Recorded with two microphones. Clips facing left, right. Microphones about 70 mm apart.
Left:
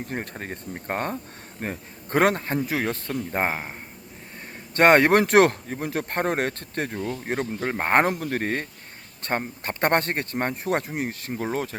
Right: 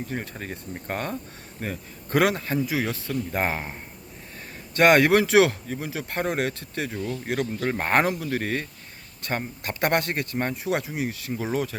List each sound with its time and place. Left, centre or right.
0.1 s speech: left
4.7 s speech: left
8.0 s speech: left